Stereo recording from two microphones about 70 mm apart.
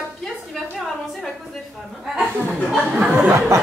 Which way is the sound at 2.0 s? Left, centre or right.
Centre.